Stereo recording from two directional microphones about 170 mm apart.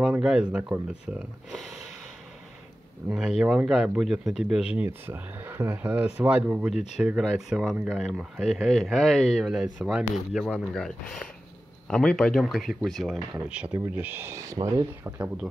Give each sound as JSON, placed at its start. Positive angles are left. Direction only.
{"t": 0.0, "sound": "speech", "side_deg": -5}
{"t": 3.1, "sound": "speech", "side_deg": 0}
{"t": 6.7, "sound": "speech", "side_deg": 40}
{"t": 7.0, "sound": "speech", "side_deg": -5}